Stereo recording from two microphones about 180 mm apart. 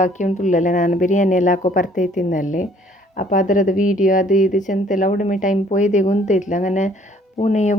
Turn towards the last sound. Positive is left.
turn(degrees=40)  # may be behind; listen again after turning